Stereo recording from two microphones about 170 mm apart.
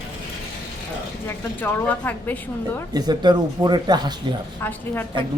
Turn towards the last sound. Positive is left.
turn(degrees=10)  # may be behind; listen again after turning